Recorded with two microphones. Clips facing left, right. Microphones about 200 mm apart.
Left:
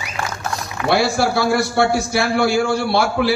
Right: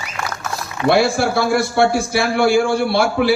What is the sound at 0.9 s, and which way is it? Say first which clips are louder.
A man's voice: right 2 dB; 55° right (ahead or behind).